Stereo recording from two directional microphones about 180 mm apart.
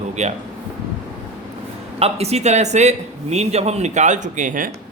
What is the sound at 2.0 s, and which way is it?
A man's voice, 35° right (ahead or behind).